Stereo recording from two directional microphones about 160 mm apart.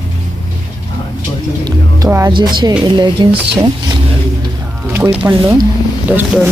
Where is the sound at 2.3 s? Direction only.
30° right (ahead or behind).